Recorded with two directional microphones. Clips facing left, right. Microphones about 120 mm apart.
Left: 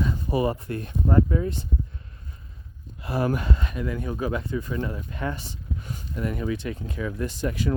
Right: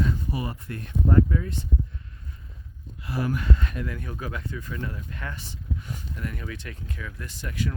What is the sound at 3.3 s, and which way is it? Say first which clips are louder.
Speech: left 1 dB; 20° left (ahead or behind).